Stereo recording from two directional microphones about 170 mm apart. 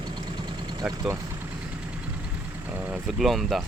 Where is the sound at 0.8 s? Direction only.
20° right (ahead or behind).